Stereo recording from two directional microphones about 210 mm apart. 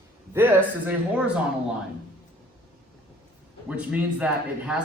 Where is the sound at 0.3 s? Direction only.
10° right (ahead or behind).